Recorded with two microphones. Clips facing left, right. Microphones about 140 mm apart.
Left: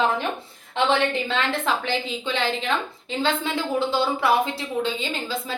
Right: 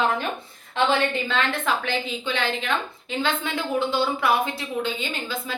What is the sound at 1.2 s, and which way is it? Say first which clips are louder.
A woman's voice: even; 30° left (ahead or behind).